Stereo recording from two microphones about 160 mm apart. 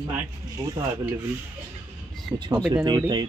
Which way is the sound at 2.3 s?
Centre (ahead or behind).